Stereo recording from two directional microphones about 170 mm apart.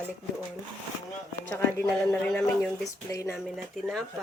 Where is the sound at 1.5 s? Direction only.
15° left (ahead or behind).